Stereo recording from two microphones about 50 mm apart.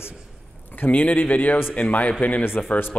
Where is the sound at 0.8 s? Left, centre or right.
Left.